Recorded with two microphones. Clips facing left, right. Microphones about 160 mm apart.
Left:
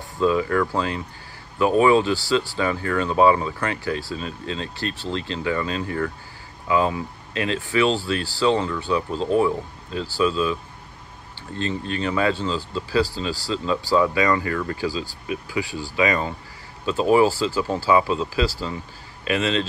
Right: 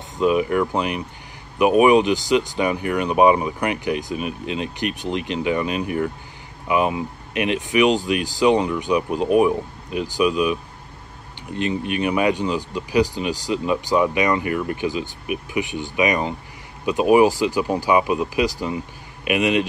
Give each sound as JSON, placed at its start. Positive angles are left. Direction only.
{"t": 0.2, "sound": "speech", "side_deg": -20}